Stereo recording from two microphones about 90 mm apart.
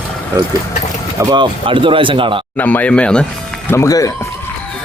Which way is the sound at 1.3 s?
65° right (ahead or behind).